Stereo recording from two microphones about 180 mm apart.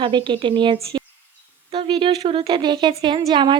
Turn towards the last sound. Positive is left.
turn(degrees=-25)  # may be behind; listen again after turning